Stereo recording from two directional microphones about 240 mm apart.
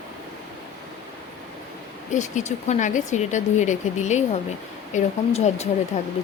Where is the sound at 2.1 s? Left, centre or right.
Left.